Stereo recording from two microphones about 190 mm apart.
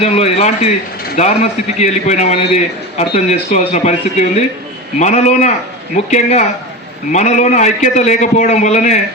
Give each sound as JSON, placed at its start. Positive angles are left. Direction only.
{"t": 0.0, "sound": "a man's voice", "side_deg": 35}